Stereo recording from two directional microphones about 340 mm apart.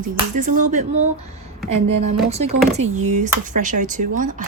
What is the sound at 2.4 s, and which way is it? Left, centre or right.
Speech, right.